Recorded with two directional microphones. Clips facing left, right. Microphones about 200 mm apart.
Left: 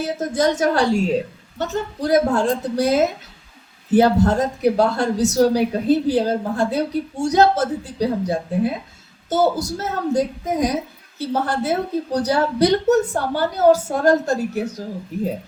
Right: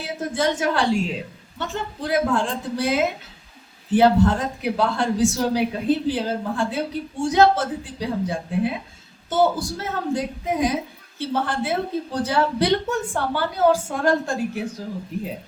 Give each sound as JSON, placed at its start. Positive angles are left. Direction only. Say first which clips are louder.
{"t": 0.0, "sound": "speech", "louder": "left 4 dB", "side_deg": 40}